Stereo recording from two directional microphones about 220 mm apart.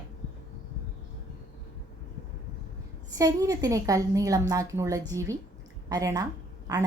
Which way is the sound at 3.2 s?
15° right (ahead or behind).